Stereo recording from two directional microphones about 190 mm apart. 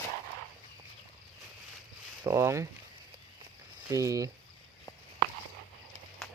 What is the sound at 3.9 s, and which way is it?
Speech, 15° right (ahead or behind).